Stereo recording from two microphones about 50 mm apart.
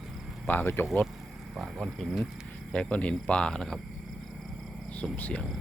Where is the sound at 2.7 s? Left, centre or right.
Left.